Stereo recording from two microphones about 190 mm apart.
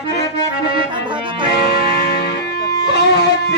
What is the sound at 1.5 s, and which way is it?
Music, 60° left (ahead or behind).